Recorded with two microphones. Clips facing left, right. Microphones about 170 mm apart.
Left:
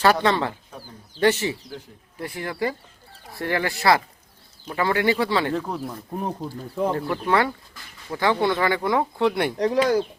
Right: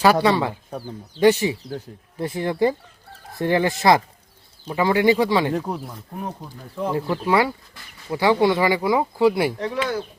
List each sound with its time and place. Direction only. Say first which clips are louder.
0.0 s speech: right 2 dB; 10° right (ahead or behind)
2.1 s speech: right 6 dB; 25° right (ahead or behind)
6.9 s speech: right 5 dB; 10° right (ahead or behind)
9.6 s speech: left 5 dB; 40° left (ahead or behind)